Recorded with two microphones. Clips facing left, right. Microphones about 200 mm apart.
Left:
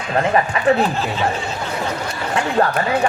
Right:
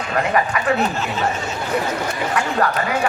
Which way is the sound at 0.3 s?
25° left (ahead or behind).